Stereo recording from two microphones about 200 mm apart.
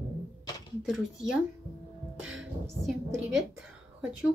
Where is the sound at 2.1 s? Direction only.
75° right (ahead or behind).